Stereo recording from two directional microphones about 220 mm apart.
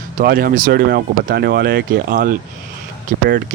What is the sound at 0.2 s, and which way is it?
Speech, 45° right (ahead or behind).